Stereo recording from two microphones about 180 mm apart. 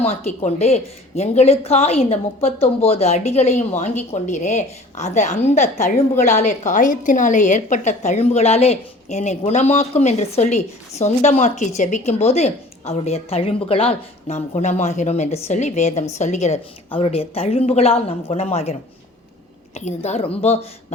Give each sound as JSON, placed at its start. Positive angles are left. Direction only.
{"t": 0.0, "sound": "a woman's voice", "side_deg": 40}